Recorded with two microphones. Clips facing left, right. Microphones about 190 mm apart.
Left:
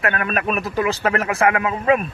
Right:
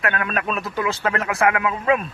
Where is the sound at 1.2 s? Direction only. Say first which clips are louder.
Even; 45° left (ahead or behind).